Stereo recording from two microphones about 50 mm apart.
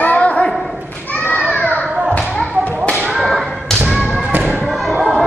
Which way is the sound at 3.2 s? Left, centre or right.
Centre.